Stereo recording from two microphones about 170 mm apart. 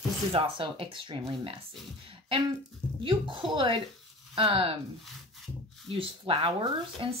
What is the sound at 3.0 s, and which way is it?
Speech, 30° right (ahead or behind).